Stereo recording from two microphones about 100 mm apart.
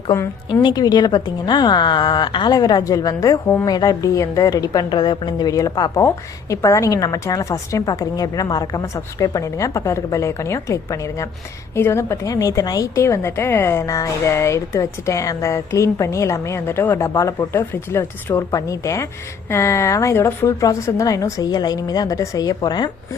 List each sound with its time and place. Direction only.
0.6 s a woman's voice: 45° left (ahead or behind)
17.6 s a woman's voice: 20° left (ahead or behind); by 22.9 s 45° left (ahead or behind)